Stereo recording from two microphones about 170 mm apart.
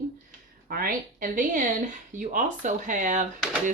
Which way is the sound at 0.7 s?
55° right (ahead or behind).